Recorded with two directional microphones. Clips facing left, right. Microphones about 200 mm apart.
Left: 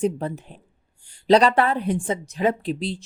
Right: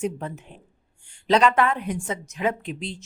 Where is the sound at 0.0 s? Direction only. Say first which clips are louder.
Left 5 dB; 35° left (ahead or behind).